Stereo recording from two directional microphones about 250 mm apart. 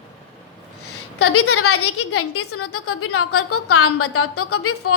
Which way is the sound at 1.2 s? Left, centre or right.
Left.